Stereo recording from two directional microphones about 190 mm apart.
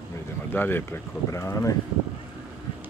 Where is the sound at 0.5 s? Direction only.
10° left (ahead or behind).